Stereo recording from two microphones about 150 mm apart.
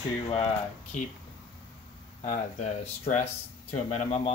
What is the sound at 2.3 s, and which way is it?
Speech, 50° left (ahead or behind).